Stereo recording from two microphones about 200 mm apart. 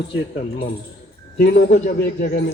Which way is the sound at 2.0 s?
55° left (ahead or behind).